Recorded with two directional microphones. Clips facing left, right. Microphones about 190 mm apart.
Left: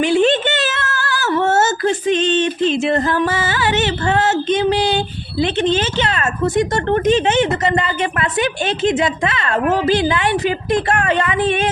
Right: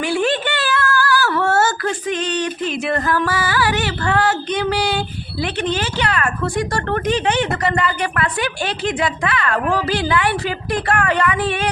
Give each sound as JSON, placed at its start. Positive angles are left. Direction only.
{"t": 0.0, "sound": "speech", "side_deg": 20}